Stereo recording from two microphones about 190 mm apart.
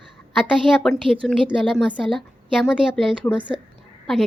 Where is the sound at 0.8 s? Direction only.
Centre (ahead or behind).